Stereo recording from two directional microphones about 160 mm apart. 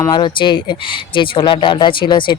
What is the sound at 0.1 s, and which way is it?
Speech, 30° left (ahead or behind).